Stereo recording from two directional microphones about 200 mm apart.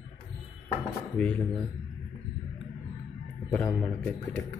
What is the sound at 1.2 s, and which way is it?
Speech, 5° left (ahead or behind).